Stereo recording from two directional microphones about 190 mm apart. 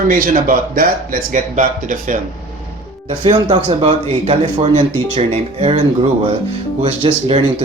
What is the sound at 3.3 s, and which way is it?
A man's voice, 30° right (ahead or behind).